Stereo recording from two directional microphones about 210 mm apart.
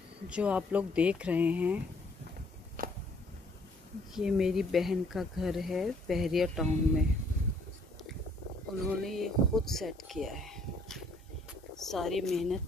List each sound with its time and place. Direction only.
0.3 s speech: 5° right (ahead or behind)
2.8 s a sound: 40° right (ahead or behind)
4.1 s speech: 5° right (ahead or behind)
9.0 s speech: centre (ahead or behind)